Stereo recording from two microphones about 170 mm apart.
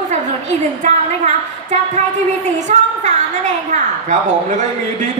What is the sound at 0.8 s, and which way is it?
A woman's voice, 45° right (ahead or behind).